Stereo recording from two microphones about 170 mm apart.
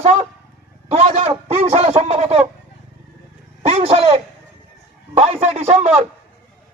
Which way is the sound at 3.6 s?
35° right (ahead or behind).